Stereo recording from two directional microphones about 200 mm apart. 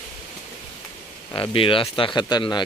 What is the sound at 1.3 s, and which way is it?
Speech, 25° left (ahead or behind).